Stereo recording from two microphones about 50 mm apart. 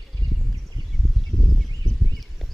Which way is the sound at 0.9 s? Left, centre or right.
Centre.